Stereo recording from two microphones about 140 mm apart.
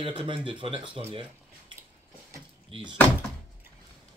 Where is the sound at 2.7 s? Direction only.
35° right (ahead or behind).